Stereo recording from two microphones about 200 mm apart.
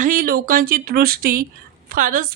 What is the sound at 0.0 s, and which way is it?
Speech, 45° right (ahead or behind).